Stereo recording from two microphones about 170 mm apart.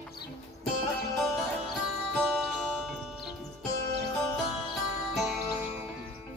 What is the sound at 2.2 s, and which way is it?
Music, centre (ahead or behind).